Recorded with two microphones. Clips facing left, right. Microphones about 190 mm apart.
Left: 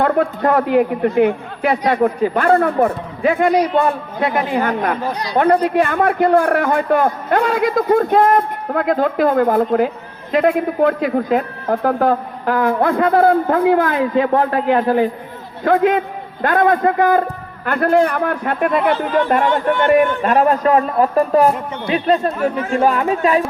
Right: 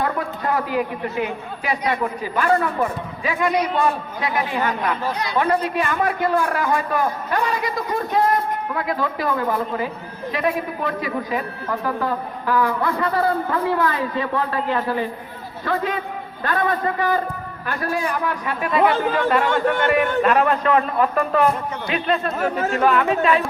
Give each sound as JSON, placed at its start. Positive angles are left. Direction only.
{"t": 0.0, "sound": "a man's voice", "side_deg": 60}